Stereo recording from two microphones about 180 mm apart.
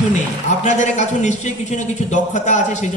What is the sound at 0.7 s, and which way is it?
A man's voice, 40° left (ahead or behind).